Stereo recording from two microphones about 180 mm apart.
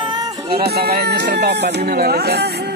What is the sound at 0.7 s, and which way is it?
Speech, 60° right (ahead or behind).